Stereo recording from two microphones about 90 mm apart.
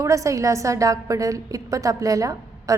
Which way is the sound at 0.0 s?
35° right (ahead or behind).